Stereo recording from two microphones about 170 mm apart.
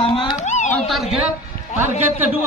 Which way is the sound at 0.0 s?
30° left (ahead or behind).